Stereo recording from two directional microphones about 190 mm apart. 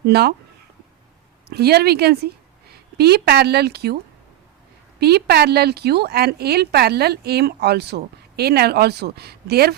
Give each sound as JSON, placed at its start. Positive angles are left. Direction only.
{"t": 0.0, "sound": "a woman's voice", "side_deg": -60}
{"t": 1.5, "sound": "a woman's voice", "side_deg": -55}
{"t": 4.9, "sound": "a woman's voice", "side_deg": -55}